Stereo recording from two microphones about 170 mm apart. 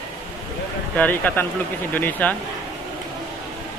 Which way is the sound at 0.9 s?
10° left (ahead or behind).